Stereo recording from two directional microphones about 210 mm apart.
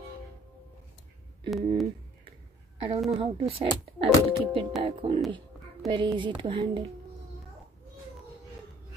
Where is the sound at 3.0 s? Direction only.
25° right (ahead or behind).